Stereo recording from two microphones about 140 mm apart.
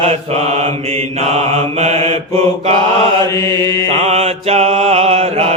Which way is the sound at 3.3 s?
25° left (ahead or behind).